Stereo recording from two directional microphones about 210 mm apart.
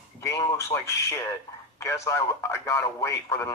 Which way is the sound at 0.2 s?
15° left (ahead or behind).